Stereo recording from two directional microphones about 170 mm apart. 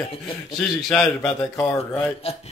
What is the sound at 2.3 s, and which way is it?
Speech, 35° left (ahead or behind).